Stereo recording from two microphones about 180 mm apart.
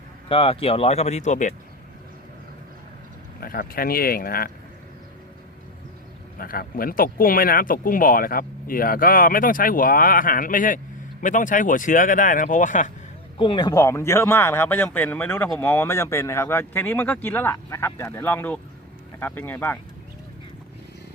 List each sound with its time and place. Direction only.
0.3 s speech: 30° left (ahead or behind)
3.4 s speech: 55° left (ahead or behind)
6.4 s speech: 55° left (ahead or behind)
13.4 s speech: 25° left (ahead or behind)